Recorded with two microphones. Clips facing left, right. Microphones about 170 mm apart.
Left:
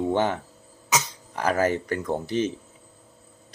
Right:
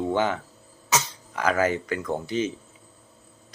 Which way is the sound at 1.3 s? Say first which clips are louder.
Even; 35° left (ahead or behind).